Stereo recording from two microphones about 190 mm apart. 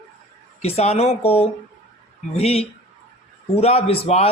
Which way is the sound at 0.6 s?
35° left (ahead or behind).